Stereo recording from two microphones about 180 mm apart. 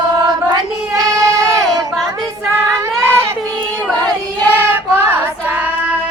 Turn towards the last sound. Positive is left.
turn(degrees=-10)  # may be behind; listen again after turning